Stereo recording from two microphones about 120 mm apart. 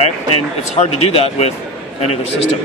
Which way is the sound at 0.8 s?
60° left (ahead or behind).